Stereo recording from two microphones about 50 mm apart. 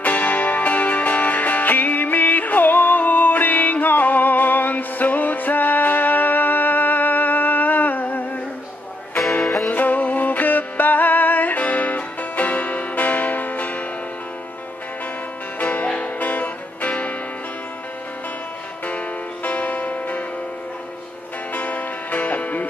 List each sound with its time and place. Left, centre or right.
0.0 s music: left
9.7 s music: left
15.6 s music: left
18.9 s music: left
21.5 s music: left